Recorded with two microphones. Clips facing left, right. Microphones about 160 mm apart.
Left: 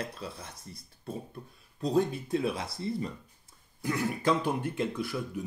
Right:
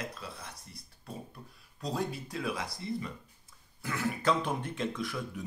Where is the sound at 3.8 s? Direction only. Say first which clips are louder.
Left 3 dB; 15° left (ahead or behind).